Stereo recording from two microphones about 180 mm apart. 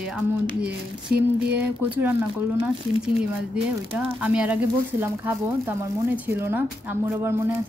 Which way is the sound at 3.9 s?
5° right (ahead or behind).